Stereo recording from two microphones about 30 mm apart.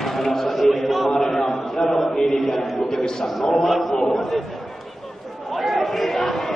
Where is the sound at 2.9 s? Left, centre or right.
Centre.